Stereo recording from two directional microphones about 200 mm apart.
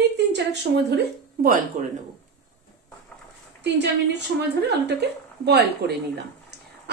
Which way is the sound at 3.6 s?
60° right (ahead or behind).